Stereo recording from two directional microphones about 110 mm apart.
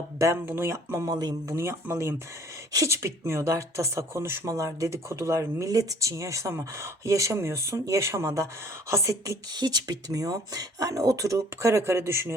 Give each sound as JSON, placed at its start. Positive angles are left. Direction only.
{"t": 0.4, "sound": "speech", "side_deg": -20}
{"t": 1.5, "sound": "speech", "side_deg": -25}